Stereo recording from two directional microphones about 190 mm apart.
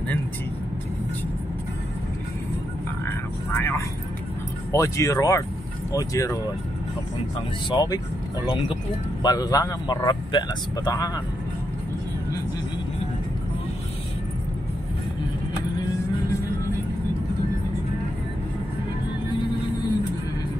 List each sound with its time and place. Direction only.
3.1 s vehicle: 10° left (ahead or behind)
4.7 s speech: 15° left (ahead or behind)
7.7 s a man's voice: 20° left (ahead or behind)